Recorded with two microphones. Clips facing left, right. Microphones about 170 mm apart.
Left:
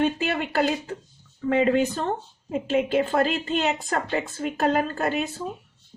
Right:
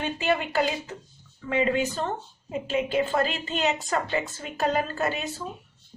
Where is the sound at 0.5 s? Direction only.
50° left (ahead or behind).